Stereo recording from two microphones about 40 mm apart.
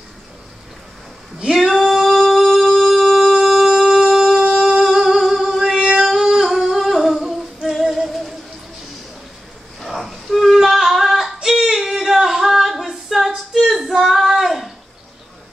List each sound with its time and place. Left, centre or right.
1.4 s female singing: centre
3.9 s humming: centre
5.2 s singing: centre
5.6 s singing: centre
6.0 s humming: centre
9.8 s a sound: centre
11.4 s singing: centre
13.7 s female singing: centre